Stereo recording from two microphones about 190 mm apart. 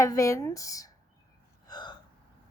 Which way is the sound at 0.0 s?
15° left (ahead or behind).